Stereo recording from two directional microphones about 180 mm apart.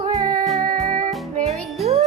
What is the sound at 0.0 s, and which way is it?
Music, 25° right (ahead or behind).